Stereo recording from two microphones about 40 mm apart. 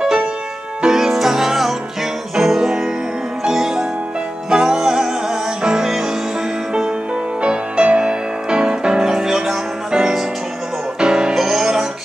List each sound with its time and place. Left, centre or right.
0.8 s music: centre
7.4 s music: right; by 11.8 s centre